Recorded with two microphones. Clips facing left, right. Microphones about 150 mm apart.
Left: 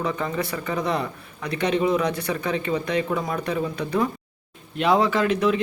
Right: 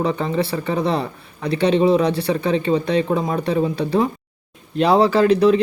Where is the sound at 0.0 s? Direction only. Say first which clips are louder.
Right 6 dB; 30° right (ahead or behind).